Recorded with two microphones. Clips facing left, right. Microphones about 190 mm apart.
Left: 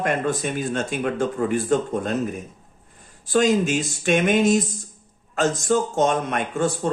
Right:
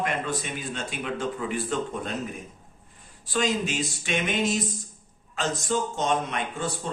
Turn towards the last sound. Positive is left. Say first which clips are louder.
# left 8 dB
turn(degrees=45)  # may be behind; listen again after turning